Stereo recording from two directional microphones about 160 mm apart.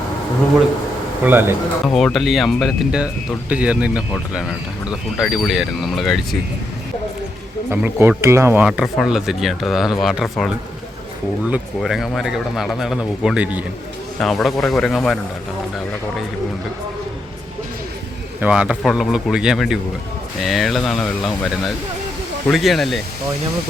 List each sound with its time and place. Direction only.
1.2 s speech: 15° right (ahead or behind)
1.9 s speech: 5° left (ahead or behind)
7.7 s speech: 15° right (ahead or behind)
8.6 s speech: 5° right (ahead or behind)
14.2 s speech: centre (ahead or behind)
18.3 s speech: 10° right (ahead or behind)
22.4 s speech: centre (ahead or behind)